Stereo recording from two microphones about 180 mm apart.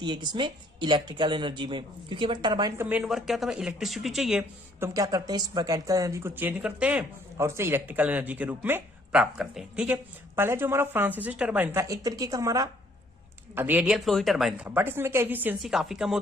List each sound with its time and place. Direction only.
0.0 s speech: 25° right (ahead or behind)
2.8 s speech: 5° right (ahead or behind)
4.9 s speech: 20° right (ahead or behind); by 16.1 s centre (ahead or behind)